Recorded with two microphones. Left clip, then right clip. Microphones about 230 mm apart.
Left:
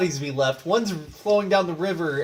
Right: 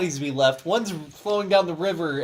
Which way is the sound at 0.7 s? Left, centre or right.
Right.